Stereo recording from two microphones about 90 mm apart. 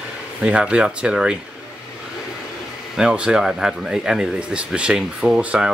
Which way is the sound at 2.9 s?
10° right (ahead or behind).